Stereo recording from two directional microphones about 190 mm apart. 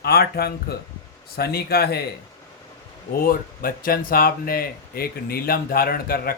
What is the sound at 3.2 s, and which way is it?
A man's voice, 50° left (ahead or behind).